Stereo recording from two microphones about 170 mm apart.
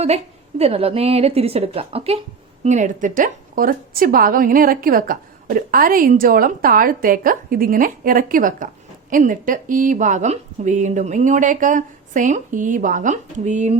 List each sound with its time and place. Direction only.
0.6 s speech: 35° right (ahead or behind)
2.6 s a woman's voice: 45° right (ahead or behind)